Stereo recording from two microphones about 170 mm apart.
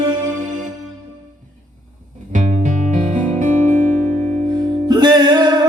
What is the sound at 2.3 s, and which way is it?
Music, 45° right (ahead or behind).